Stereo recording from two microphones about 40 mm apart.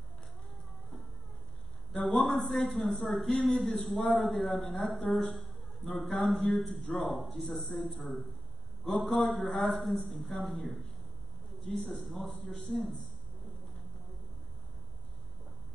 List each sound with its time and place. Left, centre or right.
1.9 s a man's voice: centre
8.9 s a man's voice: centre
11.9 s a man's voice: centre